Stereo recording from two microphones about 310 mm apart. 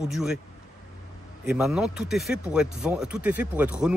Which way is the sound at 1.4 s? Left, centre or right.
Centre.